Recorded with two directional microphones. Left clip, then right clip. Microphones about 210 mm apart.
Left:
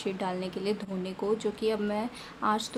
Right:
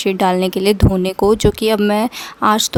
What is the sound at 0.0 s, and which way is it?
Speech, 55° right (ahead or behind).